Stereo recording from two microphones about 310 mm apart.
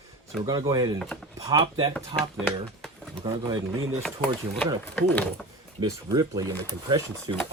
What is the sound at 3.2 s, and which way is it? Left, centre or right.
Speech, centre.